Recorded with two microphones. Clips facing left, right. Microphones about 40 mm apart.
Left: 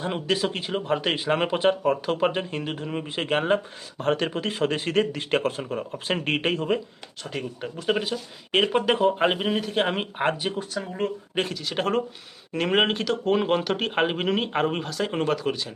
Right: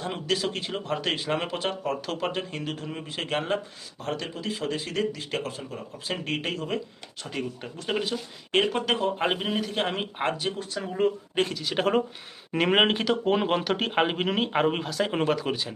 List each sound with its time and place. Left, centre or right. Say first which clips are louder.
0.0 s speech: left 3 dB; centre
3.9 s a man's voice: left 8 dB; left
7.3 s speech: left 1 dB; centre
8.7 s speech: left 5 dB; centre
11.0 s speech: right 3 dB; centre